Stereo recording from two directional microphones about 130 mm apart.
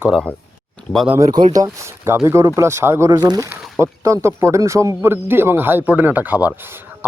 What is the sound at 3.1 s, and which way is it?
Speech, 30° right (ahead or behind).